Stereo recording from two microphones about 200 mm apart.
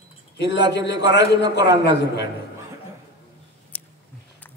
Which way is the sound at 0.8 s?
60° left (ahead or behind).